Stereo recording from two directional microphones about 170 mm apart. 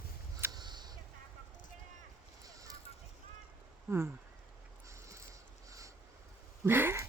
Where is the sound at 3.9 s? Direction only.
15° right (ahead or behind).